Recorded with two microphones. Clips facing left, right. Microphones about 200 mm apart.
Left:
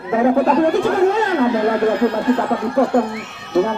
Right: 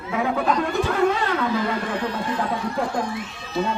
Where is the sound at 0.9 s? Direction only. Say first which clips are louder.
Left 6 dB; 40° left (ahead or behind).